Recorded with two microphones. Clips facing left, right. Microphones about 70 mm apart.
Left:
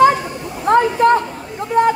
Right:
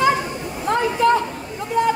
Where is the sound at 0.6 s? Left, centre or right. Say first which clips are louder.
Left 5 dB; left.